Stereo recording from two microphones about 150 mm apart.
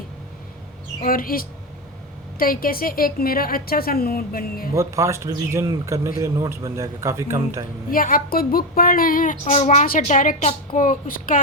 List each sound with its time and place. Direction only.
1.0 s a woman's voice: 70° left (ahead or behind)
4.7 s a man's voice: 20° right (ahead or behind)
7.9 s a woman's voice: 70° left (ahead or behind)
9.5 s a woman's voice: 45° left (ahead or behind)
10.0 s a woman's voice: 60° left (ahead or behind)